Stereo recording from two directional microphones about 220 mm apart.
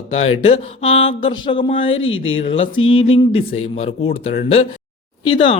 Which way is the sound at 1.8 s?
60° left (ahead or behind).